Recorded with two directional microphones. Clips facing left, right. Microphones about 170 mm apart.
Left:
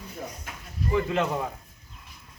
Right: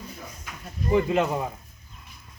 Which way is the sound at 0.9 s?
15° right (ahead or behind).